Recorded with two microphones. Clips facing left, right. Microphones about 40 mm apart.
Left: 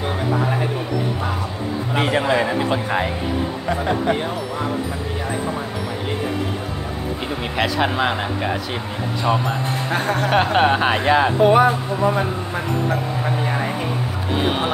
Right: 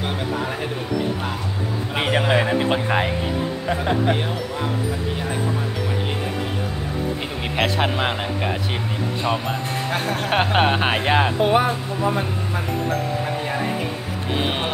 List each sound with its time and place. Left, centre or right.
2.0 s speech: centre
3.6 s speech: centre
7.8 s speech: centre
9.8 s speech: centre
10.3 s speech: centre
12.0 s speech: centre
14.4 s speech: centre